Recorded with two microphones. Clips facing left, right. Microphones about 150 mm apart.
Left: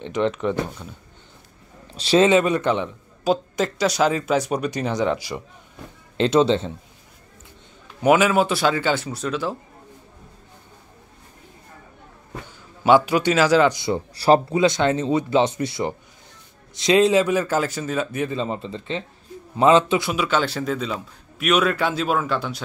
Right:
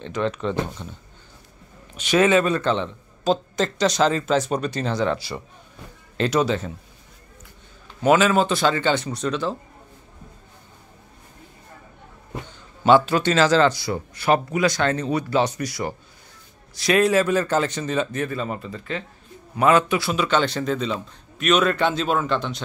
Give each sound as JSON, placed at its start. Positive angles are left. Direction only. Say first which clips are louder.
{"t": 0.0, "sound": "speech", "louder": "left 3 dB", "side_deg": 20}
{"t": 2.0, "sound": "speech", "louder": "left 2 dB", "side_deg": 30}
{"t": 8.0, "sound": "speech", "louder": "left 1 dB", "side_deg": 15}
{"t": 12.8, "sound": "speech", "louder": "even", "side_deg": 10}
{"t": 14.1, "sound": "speech", "louder": "left 4 dB", "side_deg": 35}
{"t": 18.2, "sound": "speech", "louder": "left 2 dB", "side_deg": 25}